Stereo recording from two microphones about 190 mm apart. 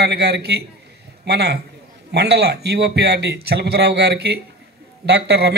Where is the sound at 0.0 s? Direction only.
60° right (ahead or behind).